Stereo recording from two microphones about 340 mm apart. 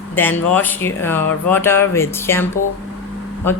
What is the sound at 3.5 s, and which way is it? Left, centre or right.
Speech, centre.